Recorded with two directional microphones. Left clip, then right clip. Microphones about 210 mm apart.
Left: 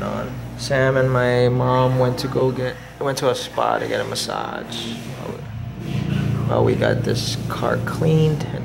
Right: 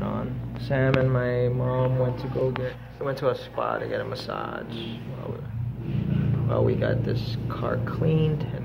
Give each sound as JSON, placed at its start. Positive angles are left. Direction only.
{"t": 0.7, "sound": "speech", "side_deg": 15}
{"t": 6.5, "sound": "speech", "side_deg": 35}